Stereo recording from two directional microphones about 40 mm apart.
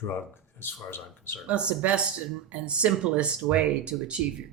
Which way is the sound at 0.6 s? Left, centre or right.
Left.